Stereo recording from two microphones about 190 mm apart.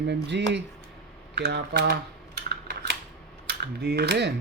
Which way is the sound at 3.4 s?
60° right (ahead or behind).